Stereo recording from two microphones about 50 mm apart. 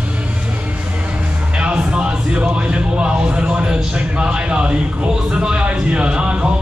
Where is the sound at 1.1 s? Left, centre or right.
Right.